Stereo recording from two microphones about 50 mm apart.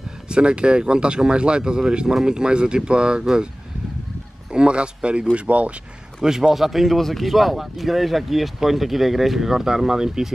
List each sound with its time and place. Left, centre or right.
0.3 s speech: centre
4.5 s speech: centre
6.2 s speech: centre